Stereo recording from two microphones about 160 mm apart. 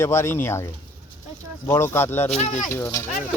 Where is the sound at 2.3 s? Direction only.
50° left (ahead or behind).